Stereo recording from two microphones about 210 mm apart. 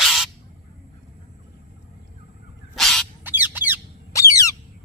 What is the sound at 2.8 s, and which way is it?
Bird, centre (ahead or behind).